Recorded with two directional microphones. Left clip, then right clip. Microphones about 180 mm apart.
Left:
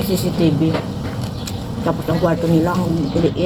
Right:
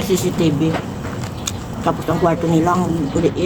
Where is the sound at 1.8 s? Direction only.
15° right (ahead or behind).